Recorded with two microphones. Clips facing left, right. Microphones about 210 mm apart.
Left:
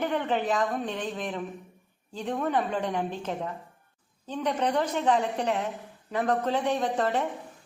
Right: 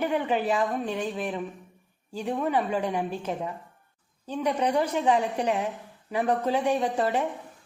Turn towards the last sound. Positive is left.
turn(degrees=-10)  # may be behind; listen again after turning